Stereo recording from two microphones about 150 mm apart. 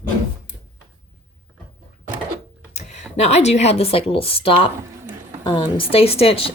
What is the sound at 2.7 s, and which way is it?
A woman's voice, 50° left (ahead or behind).